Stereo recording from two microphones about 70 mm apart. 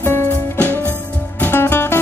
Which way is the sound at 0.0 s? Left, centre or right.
Left.